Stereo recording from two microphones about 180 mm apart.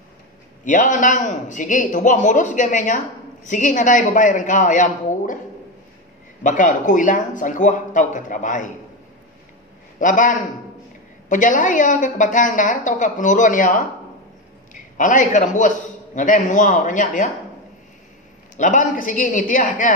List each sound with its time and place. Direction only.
0.7 s a woman's voice: 45° left (ahead or behind)
6.4 s a woman's voice: 45° left (ahead or behind)
9.9 s a man's voice: 45° left (ahead or behind)
18.6 s a woman's voice: 45° left (ahead or behind)